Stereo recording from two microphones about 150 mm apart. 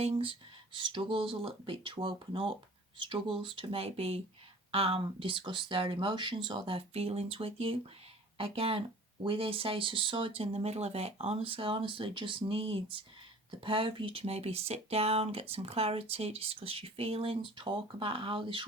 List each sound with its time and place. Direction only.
0.0 s speech: 40° right (ahead or behind)